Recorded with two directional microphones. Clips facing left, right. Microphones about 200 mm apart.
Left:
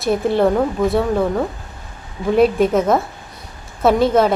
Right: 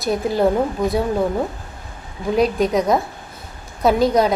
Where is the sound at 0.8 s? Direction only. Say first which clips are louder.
Left 3 dB; 20° right (ahead or behind).